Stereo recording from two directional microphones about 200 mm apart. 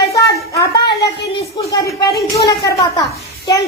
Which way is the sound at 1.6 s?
15° left (ahead or behind).